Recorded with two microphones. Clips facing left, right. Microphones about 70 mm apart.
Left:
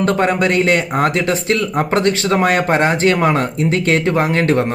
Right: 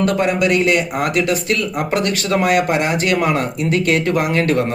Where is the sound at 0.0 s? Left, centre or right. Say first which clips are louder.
Left 1 dB; left.